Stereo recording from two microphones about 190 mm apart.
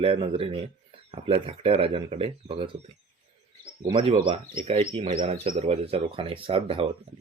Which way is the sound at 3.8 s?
25° right (ahead or behind).